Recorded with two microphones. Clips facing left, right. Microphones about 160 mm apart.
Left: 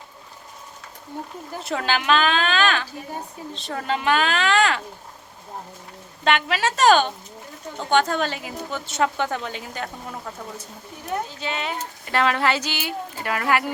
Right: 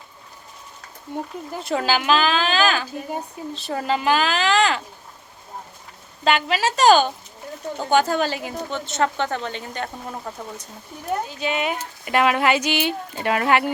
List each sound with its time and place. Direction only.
1.6 s a woman's voice: centre (ahead or behind)
6.2 s a woman's voice: centre (ahead or behind)
11.3 s speech: 15° right (ahead or behind)